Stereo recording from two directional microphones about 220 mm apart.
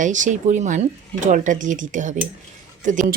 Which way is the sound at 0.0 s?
35° right (ahead or behind).